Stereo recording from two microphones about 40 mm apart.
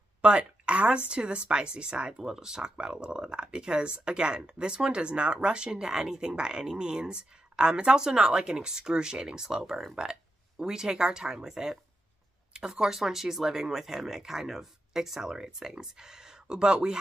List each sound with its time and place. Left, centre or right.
0.2 s speech: right; by 9.9 s centre
10.6 s speech: centre